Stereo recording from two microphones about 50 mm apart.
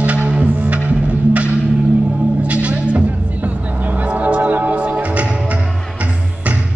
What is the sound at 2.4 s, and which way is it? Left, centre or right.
Music, right.